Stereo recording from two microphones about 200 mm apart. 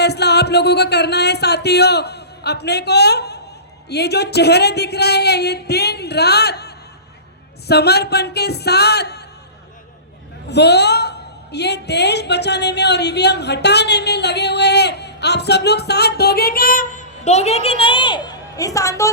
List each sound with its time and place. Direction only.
0.0 s speech: 55° left (ahead or behind)
10.5 s speech: 55° left (ahead or behind); by 19.1 s 15° left (ahead or behind)